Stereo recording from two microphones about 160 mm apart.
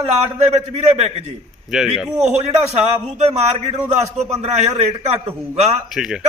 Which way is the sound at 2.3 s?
40° right (ahead or behind).